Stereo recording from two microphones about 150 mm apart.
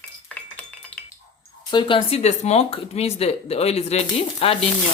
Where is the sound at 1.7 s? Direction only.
35° left (ahead or behind).